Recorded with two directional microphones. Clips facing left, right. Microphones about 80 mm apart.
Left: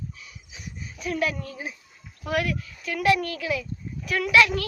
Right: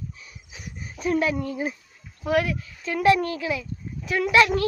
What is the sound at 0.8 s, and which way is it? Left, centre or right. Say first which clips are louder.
Speech: right 4 dB; right.